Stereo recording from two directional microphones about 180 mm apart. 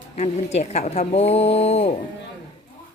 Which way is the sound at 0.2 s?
40° left (ahead or behind).